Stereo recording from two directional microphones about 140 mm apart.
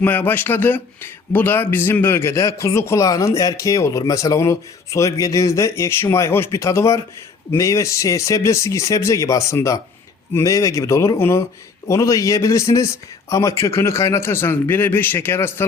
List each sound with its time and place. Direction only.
0.0 s speech: 15° left (ahead or behind)